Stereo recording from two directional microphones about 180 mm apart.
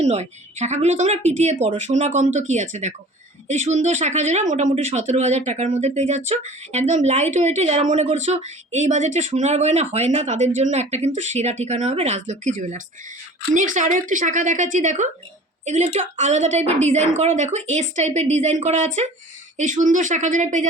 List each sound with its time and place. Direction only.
0.0 s speech: 35° right (ahead or behind)